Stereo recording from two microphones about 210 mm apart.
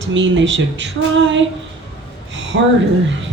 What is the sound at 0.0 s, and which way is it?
Speech, 60° right (ahead or behind).